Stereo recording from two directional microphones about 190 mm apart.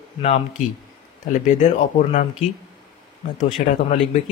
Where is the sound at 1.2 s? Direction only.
40° left (ahead or behind).